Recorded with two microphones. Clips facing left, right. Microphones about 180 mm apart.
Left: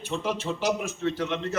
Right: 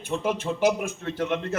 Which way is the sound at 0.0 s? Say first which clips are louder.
Right 2 dB; 55° right (ahead or behind).